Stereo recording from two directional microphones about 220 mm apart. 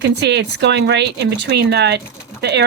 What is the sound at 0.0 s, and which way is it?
Speech, 50° right (ahead or behind).